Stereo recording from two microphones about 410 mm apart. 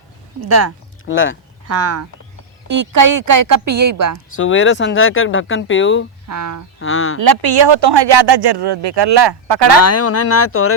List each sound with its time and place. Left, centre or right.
1.0 s speech: left
1.6 s speech: right
2.6 s a woman's voice: right
4.4 s speech: left
6.2 s speech: right
6.7 s speech: left
7.2 s speech: right
9.8 s speech: left